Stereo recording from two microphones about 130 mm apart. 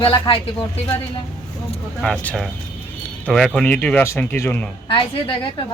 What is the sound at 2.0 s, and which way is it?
Speech, 10° left (ahead or behind).